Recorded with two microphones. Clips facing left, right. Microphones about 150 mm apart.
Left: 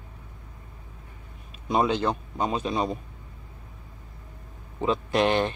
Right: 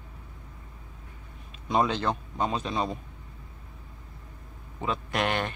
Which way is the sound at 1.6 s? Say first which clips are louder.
Left 2 dB; 10° left (ahead or behind).